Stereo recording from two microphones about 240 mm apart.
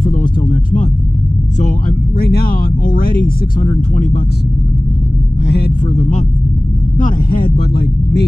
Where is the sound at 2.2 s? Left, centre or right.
Left.